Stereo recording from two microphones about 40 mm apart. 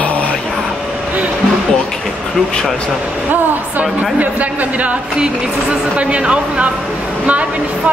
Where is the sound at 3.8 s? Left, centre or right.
Right.